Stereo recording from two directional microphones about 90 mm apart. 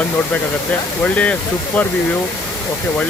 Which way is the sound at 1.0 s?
15° left (ahead or behind).